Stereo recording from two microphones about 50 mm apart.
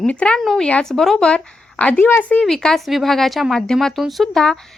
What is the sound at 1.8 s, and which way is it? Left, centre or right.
Speech, left.